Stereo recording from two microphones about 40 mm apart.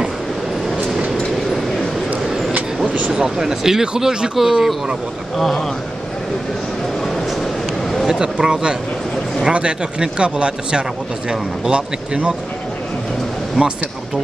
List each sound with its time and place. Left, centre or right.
2.2 s a sound: centre
3.1 s speech: centre
5.4 s speech: centre
8.1 s speech: right